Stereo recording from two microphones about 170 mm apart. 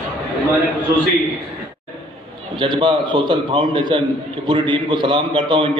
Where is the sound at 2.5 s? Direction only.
25° right (ahead or behind).